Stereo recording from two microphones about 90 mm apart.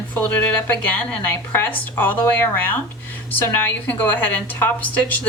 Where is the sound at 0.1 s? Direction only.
20° left (ahead or behind).